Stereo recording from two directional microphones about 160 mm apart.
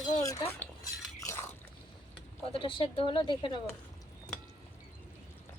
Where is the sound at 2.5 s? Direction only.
35° left (ahead or behind).